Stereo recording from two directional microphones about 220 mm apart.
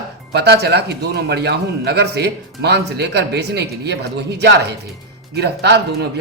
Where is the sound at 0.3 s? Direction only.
50° right (ahead or behind).